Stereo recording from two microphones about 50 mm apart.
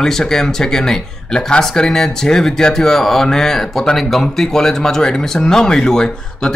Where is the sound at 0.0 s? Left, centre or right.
Centre.